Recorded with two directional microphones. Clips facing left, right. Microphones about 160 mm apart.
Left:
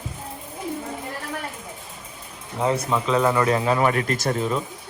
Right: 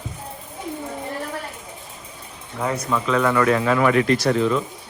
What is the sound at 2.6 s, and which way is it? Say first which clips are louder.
A man's voice: left 1 dB; 25° left (ahead or behind).